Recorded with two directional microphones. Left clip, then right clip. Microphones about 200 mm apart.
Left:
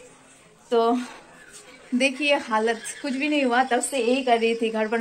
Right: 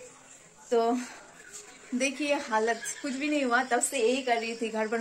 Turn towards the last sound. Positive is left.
turn(degrees=-5)  # may be behind; listen again after turning